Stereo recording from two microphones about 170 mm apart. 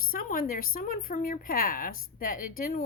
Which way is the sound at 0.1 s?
60° left (ahead or behind).